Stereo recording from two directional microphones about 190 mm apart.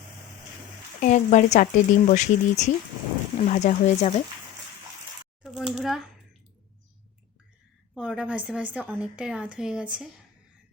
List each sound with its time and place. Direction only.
0.9 s speech: 40° left (ahead or behind)
5.4 s a sound: centre (ahead or behind)
5.7 s a woman's voice: centre (ahead or behind)
7.9 s a woman's voice: 5° right (ahead or behind)